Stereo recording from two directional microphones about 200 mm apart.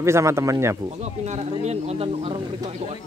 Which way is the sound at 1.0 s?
35° right (ahead or behind).